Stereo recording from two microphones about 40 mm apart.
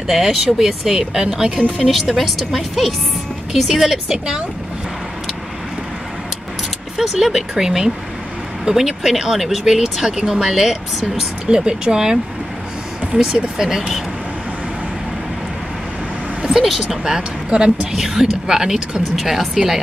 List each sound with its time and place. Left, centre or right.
0.0 s speech: centre
2.1 s a woman's voice: centre
7.0 s speech: centre
11.4 s speech: centre
16.4 s speech: centre